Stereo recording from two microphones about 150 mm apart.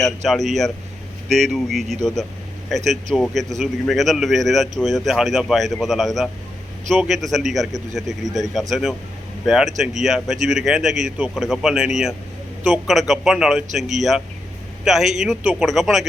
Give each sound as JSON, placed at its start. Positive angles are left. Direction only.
{"t": 0.0, "sound": "speech", "side_deg": 0}